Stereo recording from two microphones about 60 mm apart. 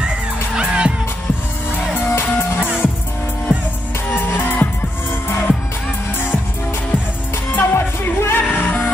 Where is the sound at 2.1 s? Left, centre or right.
Left.